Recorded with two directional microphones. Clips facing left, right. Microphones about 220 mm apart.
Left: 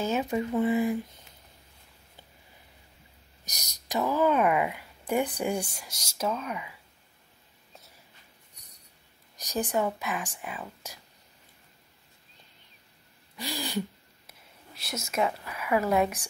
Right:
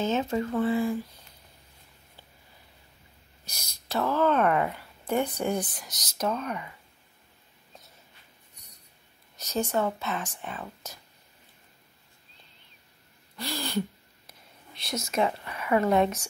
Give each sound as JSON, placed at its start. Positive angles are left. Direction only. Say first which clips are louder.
{"t": 0.0, "sound": "speech", "louder": "right 1 dB", "side_deg": 10}
{"t": 3.4, "sound": "speech", "louder": "even", "side_deg": 15}
{"t": 9.4, "sound": "speech", "louder": "right 1 dB", "side_deg": 15}
{"t": 13.4, "sound": "gasp", "louder": "right 2 dB", "side_deg": 15}
{"t": 14.7, "sound": "a sound", "louder": "right 3 dB", "side_deg": 5}
{"t": 15.0, "sound": "speech", "louder": "right 1 dB", "side_deg": 5}